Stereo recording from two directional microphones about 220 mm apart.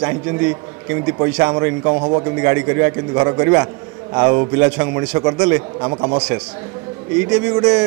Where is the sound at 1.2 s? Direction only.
15° right (ahead or behind).